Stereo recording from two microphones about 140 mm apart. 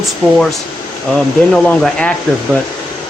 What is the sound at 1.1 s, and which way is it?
Speech, 5° left (ahead or behind).